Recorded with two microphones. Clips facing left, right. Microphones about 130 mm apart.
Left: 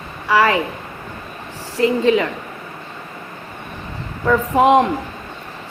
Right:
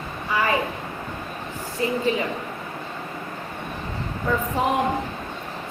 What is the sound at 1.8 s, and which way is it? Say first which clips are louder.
Speech: left 8 dB; 90° left.